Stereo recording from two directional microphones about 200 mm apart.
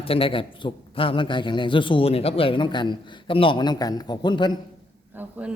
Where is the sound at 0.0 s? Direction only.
30° left (ahead or behind).